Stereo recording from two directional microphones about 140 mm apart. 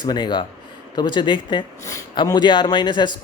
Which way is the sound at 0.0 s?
30° left (ahead or behind).